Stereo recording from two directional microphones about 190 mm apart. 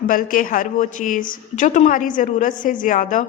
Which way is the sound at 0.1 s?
45° left (ahead or behind).